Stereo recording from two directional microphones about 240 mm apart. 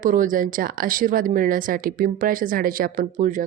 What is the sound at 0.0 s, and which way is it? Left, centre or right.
A woman's voice, right.